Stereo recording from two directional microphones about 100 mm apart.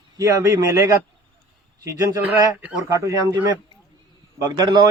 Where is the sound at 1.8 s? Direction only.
30° right (ahead or behind).